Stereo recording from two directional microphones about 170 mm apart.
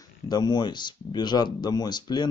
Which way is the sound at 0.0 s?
25° left (ahead or behind).